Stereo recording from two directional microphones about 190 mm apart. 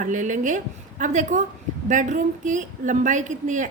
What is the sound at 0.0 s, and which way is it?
A woman's voice, 40° right (ahead or behind).